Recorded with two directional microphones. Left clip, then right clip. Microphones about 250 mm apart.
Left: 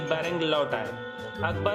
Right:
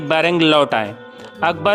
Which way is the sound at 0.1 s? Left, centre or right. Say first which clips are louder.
Right 13 dB; right.